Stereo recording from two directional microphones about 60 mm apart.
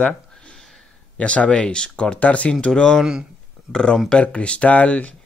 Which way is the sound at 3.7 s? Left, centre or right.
Centre.